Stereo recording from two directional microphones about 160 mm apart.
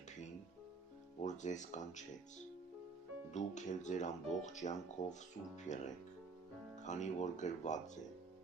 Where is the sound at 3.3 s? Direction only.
50° left (ahead or behind).